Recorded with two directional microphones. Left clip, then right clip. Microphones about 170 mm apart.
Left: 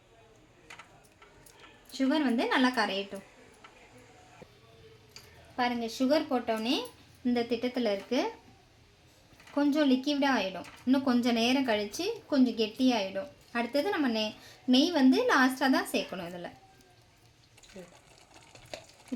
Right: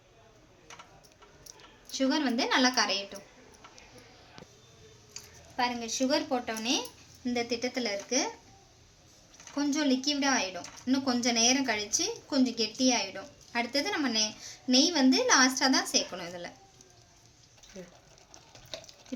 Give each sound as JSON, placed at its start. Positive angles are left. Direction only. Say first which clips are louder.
{"t": 1.9, "sound": "a woman's voice", "louder": "even", "side_deg": 45}
{"t": 5.8, "sound": "a woman's voice", "louder": "left 1 dB", "side_deg": 55}
{"t": 7.3, "sound": "a woman's voice", "louder": "left 1 dB", "side_deg": 50}
{"t": 9.6, "sound": "a woman's voice", "louder": "left 2 dB", "side_deg": 55}
{"t": 17.7, "sound": "speech", "louder": "right 2 dB", "side_deg": 5}